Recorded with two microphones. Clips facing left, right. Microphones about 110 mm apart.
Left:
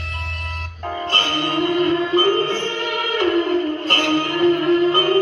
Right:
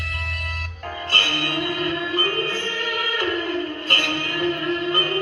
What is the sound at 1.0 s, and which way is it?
Music, 25° left (ahead or behind).